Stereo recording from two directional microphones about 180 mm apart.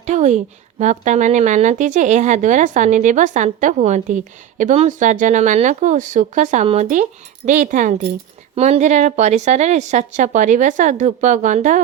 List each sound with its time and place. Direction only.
0.0 s a woman's voice: 40° right (ahead or behind)